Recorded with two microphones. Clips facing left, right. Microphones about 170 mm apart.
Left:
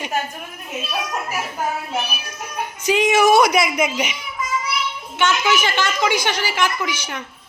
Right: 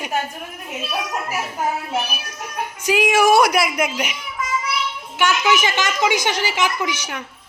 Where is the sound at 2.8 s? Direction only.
10° right (ahead or behind).